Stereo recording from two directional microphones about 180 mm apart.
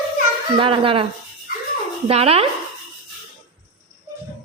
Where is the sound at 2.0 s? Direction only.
35° right (ahead or behind).